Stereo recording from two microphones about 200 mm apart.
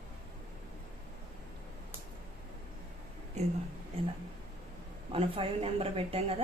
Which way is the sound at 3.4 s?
35° right (ahead or behind).